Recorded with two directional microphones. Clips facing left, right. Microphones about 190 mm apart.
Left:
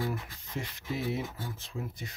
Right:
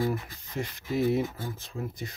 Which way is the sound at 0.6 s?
45° right (ahead or behind).